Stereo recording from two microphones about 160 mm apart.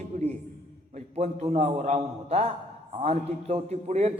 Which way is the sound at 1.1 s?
40° right (ahead or behind).